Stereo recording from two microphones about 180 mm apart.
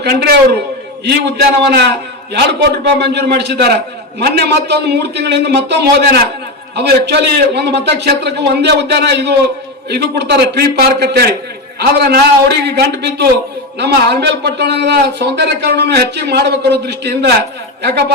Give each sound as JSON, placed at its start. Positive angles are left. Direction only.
{"t": 0.0, "sound": "a man's voice", "side_deg": -65}